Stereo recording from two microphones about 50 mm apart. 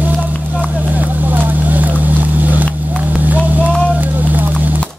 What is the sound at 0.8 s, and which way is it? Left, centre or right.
Boat, right.